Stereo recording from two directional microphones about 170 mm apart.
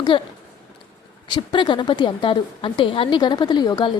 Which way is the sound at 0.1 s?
30° left (ahead or behind).